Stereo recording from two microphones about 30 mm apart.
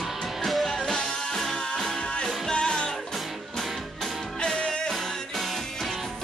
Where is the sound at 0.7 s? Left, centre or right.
Left.